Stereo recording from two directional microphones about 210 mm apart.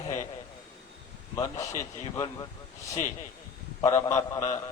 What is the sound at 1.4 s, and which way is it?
A man's voice, 15° left (ahead or behind).